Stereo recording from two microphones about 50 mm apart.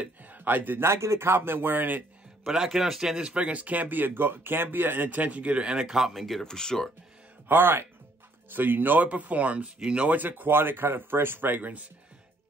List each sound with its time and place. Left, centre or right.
0.0 s speech: right
0.7 s speech: right
2.4 s speech: centre
3.2 s speech: right
6.1 s speech: centre
6.4 s speech: centre
7.4 s speech: right
9.8 s speech: centre
10.0 s speech: right